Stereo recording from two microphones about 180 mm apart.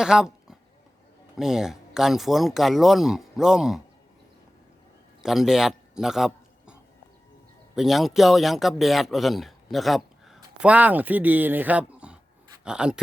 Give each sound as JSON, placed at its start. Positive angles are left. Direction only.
{"t": 0.0, "sound": "speech", "side_deg": -5}
{"t": 5.2, "sound": "a man's voice", "side_deg": 0}
{"t": 7.8, "sound": "speech", "side_deg": 0}